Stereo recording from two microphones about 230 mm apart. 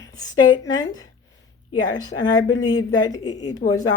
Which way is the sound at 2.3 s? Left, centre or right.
Centre.